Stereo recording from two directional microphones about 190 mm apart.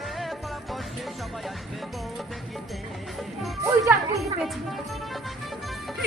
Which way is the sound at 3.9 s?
10° right (ahead or behind).